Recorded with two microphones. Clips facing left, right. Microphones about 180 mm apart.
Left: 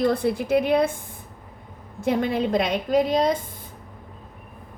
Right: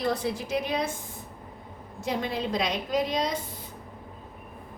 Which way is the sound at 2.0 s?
55° left (ahead or behind).